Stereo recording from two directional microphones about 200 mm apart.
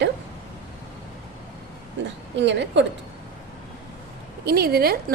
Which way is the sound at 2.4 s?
60° right (ahead or behind).